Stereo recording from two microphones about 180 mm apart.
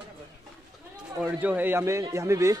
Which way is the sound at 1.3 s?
10° right (ahead or behind).